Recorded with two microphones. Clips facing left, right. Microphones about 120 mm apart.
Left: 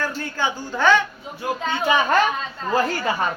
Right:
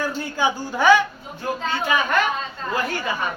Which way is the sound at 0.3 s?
15° right (ahead or behind).